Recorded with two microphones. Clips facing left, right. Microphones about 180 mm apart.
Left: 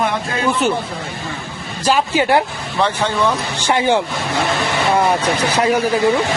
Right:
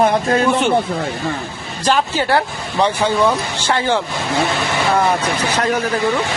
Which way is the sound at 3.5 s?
15° left (ahead or behind).